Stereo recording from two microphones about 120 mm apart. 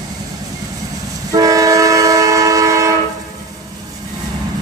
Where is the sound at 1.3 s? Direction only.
30° right (ahead or behind).